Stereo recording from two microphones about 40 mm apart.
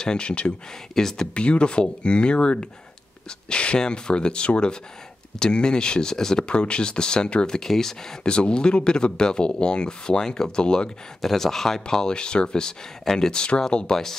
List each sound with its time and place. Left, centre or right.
0.0 s speech: left
0.9 s speech: centre
1.3 s speech: left
6.4 s speech: left; by 8.2 s centre
8.2 s speech: left
11.1 s speech: centre